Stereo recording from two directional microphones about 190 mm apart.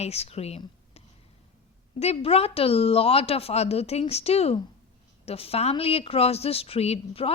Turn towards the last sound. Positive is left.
turn(degrees=30)  # may be behind; listen again after turning